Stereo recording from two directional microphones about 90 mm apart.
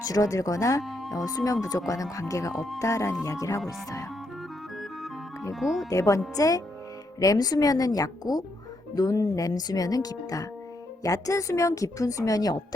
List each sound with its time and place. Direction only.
0.0 s a woman's voice: 40° left (ahead or behind)
0.8 s speech: centre (ahead or behind)
1.1 s a woman's voice: 40° left (ahead or behind)
5.5 s speech: centre (ahead or behind)
5.9 s a woman's voice: 35° left (ahead or behind)